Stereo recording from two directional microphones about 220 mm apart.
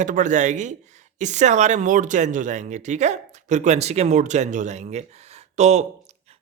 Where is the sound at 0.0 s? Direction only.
35° right (ahead or behind).